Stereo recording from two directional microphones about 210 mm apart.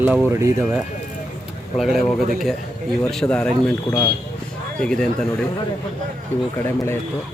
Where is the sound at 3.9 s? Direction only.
15° left (ahead or behind).